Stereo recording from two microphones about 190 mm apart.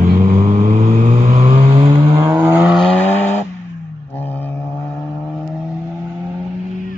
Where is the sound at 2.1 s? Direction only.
10° right (ahead or behind).